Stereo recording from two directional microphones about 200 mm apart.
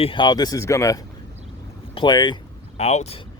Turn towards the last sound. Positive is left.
turn(degrees=30)  # may be behind; listen again after turning